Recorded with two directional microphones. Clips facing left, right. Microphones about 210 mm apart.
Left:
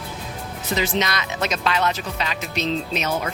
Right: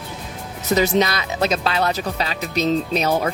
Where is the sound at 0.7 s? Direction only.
40° right (ahead or behind).